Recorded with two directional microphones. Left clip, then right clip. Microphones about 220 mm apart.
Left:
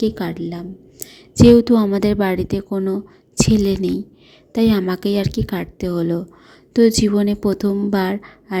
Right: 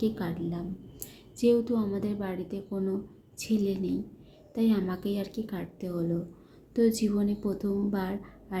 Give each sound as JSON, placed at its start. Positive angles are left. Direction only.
{"t": 0.0, "sound": "a woman's voice", "side_deg": 35}